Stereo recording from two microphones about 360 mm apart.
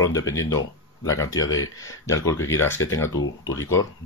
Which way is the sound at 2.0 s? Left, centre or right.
Centre.